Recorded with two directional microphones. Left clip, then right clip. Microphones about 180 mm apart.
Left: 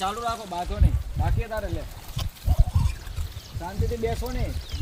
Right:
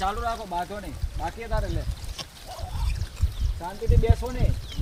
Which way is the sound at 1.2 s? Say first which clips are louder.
Even; 20° left (ahead or behind).